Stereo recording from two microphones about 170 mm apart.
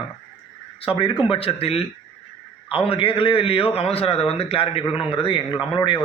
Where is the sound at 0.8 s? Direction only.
30° left (ahead or behind).